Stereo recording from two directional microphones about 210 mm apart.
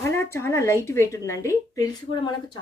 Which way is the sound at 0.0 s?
10° left (ahead or behind).